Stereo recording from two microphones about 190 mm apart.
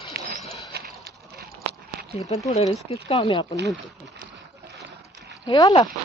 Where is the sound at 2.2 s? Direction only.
35° left (ahead or behind).